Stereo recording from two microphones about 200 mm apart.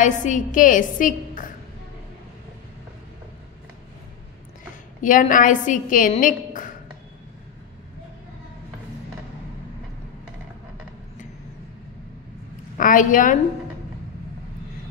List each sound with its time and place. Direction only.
0.0 s a woman's voice: 40° left (ahead or behind)
5.0 s a woman's voice: 40° left (ahead or behind)
12.7 s a woman's voice: 40° left (ahead or behind)